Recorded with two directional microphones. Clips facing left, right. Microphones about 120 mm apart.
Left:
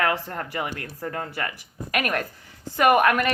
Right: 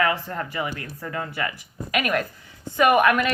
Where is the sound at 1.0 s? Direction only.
40° left (ahead or behind).